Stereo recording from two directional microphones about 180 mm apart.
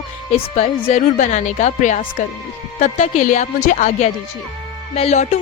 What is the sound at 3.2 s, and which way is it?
A woman's voice, 45° left (ahead or behind).